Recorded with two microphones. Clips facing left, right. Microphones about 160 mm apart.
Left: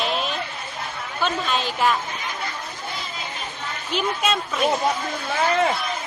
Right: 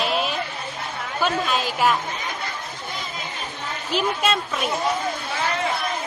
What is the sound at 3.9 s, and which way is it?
Speech, centre (ahead or behind).